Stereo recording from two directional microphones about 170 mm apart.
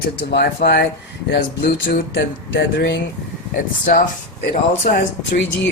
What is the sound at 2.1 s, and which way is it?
Speech, 85° left.